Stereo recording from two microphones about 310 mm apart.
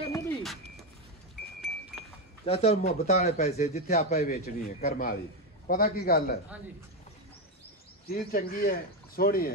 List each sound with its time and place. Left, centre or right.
0.1 s a sound: centre
2.4 s a man's voice: centre
8.1 s a man's voice: left